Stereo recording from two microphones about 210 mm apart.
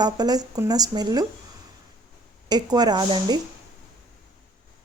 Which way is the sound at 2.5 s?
20° right (ahead or behind).